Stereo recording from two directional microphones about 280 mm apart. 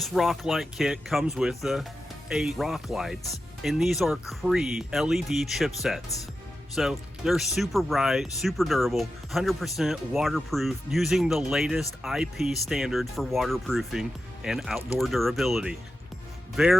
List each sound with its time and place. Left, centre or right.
0.0 s speech: centre